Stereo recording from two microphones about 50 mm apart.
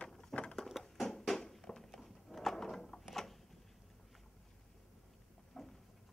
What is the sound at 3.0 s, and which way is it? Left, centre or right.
Mechanisms, centre.